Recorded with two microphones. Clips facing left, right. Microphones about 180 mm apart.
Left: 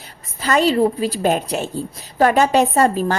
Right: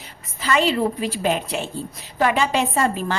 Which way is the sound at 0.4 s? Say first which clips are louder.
Left 4 dB; 40° left (ahead or behind).